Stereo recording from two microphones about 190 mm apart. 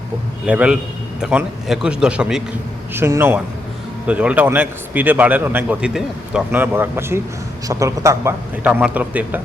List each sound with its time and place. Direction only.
0.4 s a man's voice: 5° right (ahead or behind)